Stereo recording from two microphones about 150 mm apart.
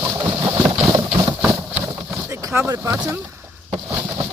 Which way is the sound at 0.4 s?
25° right (ahead or behind).